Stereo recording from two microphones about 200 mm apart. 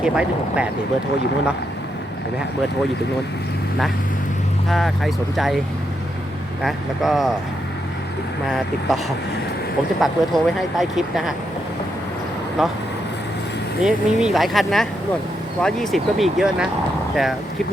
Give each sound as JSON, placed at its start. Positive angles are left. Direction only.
{"t": 0.0, "sound": "speech", "side_deg": -5}
{"t": 4.7, "sound": "speech", "side_deg": 0}
{"t": 6.6, "sound": "speech", "side_deg": 0}
{"t": 8.4, "sound": "speech", "side_deg": 0}
{"t": 10.0, "sound": "speech", "side_deg": 0}
{"t": 12.6, "sound": "speech", "side_deg": 0}
{"t": 13.8, "sound": "speech", "side_deg": -5}